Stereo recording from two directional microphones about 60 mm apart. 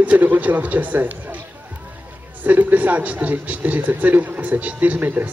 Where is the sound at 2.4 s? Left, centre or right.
Right.